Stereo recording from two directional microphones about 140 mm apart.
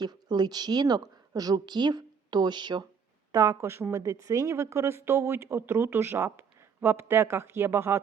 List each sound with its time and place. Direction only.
0.0 s a woman's voice: 30° right (ahead or behind)